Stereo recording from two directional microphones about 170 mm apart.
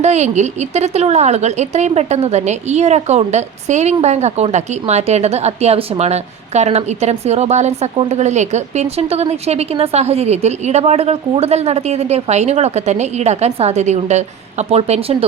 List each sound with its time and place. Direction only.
0.0 s a woman's voice: 40° right (ahead or behind)